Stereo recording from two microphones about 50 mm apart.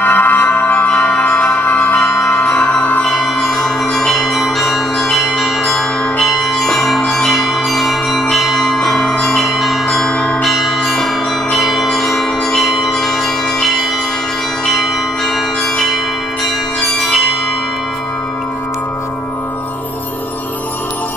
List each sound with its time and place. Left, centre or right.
0.0 s music: left
0.8 s music: left
3.1 s bell: centre
14.7 s church bell: centre
16.8 s bell: centre